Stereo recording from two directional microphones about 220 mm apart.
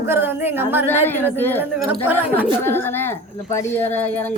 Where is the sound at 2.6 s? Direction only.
10° left (ahead or behind).